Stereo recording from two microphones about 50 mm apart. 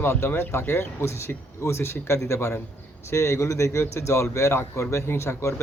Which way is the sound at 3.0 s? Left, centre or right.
Left.